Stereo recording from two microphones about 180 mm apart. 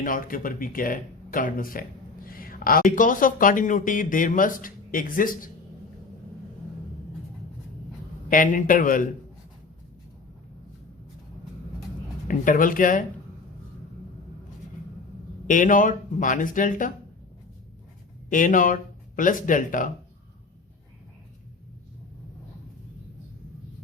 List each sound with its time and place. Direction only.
0.0 s a man's voice: 50° left (ahead or behind)
8.3 s a man's voice: 50° left (ahead or behind)
12.3 s a man's voice: 50° left (ahead or behind)
15.4 s a man's voice: 45° left (ahead or behind)
18.3 s a man's voice: 45° left (ahead or behind)